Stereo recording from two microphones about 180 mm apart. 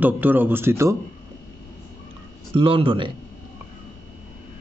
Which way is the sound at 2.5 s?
30° right (ahead or behind).